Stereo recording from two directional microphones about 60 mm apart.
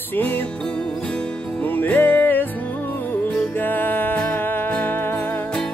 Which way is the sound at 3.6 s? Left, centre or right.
Left.